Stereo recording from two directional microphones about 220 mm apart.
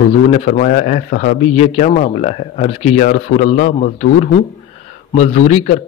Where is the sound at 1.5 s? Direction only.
30° left (ahead or behind).